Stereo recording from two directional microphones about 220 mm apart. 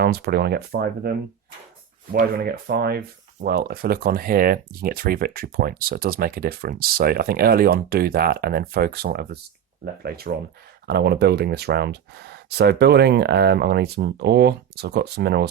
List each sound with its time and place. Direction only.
0.0 s speech: 50° right (ahead or behind)
2.1 s speech: 45° right (ahead or behind)